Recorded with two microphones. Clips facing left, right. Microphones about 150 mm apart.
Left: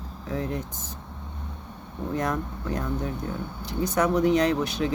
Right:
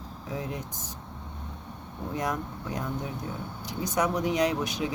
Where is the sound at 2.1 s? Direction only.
15° right (ahead or behind).